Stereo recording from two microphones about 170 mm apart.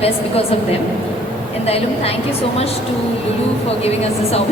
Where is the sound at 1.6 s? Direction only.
35° left (ahead or behind).